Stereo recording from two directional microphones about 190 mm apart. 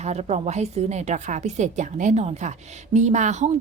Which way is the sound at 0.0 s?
35° right (ahead or behind).